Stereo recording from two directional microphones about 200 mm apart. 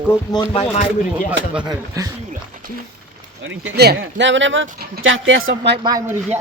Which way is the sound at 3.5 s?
60° right (ahead or behind).